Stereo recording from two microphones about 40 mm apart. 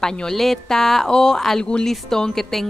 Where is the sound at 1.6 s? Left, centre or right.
Left.